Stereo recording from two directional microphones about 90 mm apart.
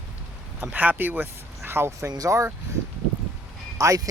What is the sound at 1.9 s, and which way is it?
Speech, 40° right (ahead or behind).